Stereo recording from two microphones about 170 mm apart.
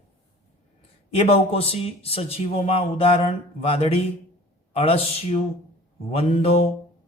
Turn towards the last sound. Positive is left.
turn(degrees=35)  # may be behind; listen again after turning